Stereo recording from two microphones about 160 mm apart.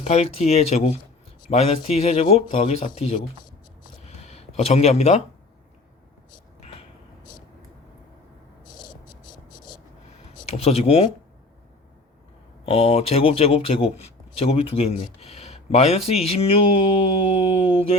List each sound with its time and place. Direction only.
0.0 s speech: 40° left (ahead or behind)
4.0 s a sound: 40° left (ahead or behind)
10.5 s speech: 40° left (ahead or behind)
12.6 s speech: 40° left (ahead or behind)